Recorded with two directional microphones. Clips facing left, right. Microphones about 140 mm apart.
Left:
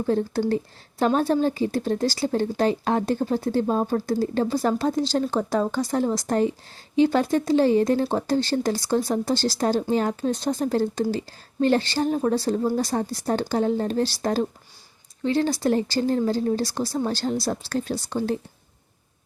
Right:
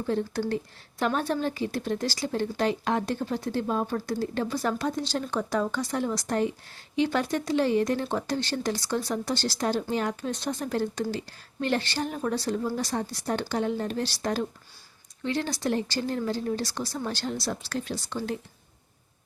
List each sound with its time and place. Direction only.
0.0 s a woman's voice: 35° left (ahead or behind)